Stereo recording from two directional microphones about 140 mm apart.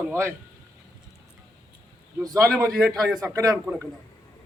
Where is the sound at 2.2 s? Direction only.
25° right (ahead or behind).